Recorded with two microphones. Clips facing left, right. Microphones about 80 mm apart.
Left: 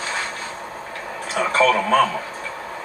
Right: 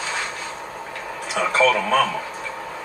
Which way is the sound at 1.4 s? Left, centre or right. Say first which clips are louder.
Left 1 dB; left.